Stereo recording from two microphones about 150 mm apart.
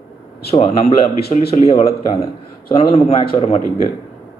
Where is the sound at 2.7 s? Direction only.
45° left (ahead or behind).